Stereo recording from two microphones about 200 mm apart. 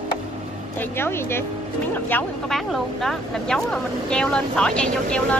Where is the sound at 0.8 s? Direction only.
10° left (ahead or behind).